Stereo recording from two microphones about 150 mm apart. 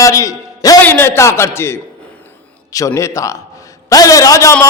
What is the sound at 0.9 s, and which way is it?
A man's voice, 15° left (ahead or behind).